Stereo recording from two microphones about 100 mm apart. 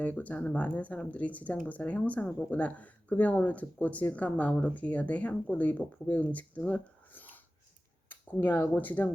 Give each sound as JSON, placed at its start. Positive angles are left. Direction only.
{"t": 0.0, "sound": "speech", "side_deg": 15}